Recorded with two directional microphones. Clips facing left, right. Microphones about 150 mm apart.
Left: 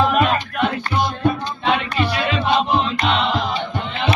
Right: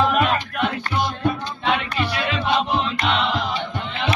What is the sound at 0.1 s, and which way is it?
Music, 30° left (ahead or behind).